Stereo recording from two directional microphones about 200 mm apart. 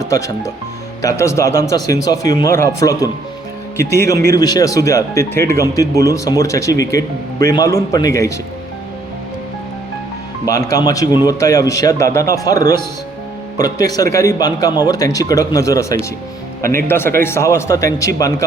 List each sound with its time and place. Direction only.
0.1 s speech: 15° left (ahead or behind)
10.4 s speech: 15° left (ahead or behind)